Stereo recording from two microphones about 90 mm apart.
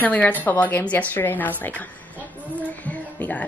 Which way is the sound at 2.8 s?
15° left (ahead or behind).